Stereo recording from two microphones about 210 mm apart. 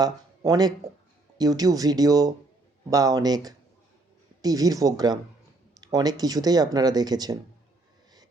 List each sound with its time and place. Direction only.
0.0 s speech: 20° right (ahead or behind)